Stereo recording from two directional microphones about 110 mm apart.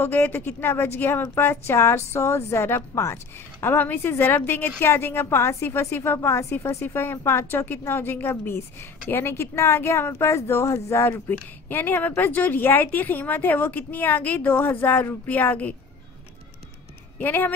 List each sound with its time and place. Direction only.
0.0 s a woman's voice: 20° left (ahead or behind)
17.2 s speech: 15° left (ahead or behind)